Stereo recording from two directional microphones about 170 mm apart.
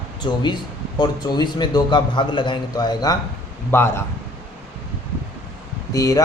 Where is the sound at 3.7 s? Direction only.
15° left (ahead or behind).